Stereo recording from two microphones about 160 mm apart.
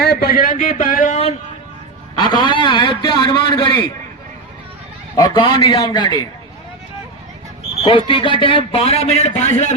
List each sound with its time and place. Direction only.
0.0 s a sound: 80° left; by 1.2 s 55° left (ahead or behind)
2.1 s a man's voice: 30° left (ahead or behind)
5.1 s a man's voice: 25° left (ahead or behind)
7.9 s a man's voice: 30° left (ahead or behind)